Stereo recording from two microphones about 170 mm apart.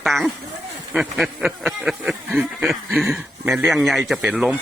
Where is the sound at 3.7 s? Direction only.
Centre (ahead or behind).